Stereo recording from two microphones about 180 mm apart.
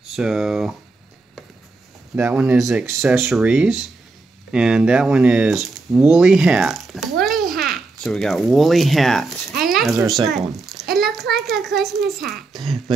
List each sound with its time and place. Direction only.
0.1 s speech: centre (ahead or behind)
2.1 s speech: 5° right (ahead or behind)
9.6 s a sound: centre (ahead or behind)
9.9 s speech: 20° right (ahead or behind)
10.5 s a sound: centre (ahead or behind)
12.2 s speech: centre (ahead or behind)